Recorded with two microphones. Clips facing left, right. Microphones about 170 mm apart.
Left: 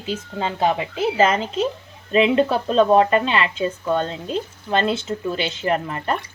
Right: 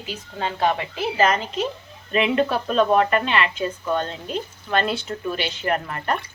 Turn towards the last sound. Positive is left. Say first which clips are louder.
# left 2 dB
turn(degrees=25)  # may be behind; listen again after turning